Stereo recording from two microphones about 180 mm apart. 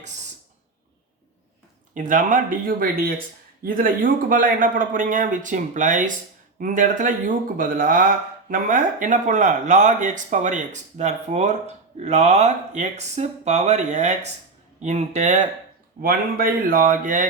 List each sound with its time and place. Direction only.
1.9 s a man's voice: 45° right (ahead or behind)
16.0 s a man's voice: 55° right (ahead or behind)